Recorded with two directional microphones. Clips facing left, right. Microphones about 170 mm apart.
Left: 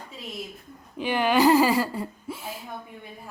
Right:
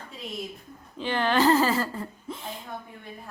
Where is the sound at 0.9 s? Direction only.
10° left (ahead or behind).